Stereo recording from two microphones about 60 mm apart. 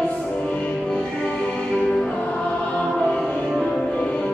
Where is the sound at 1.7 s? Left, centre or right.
Centre.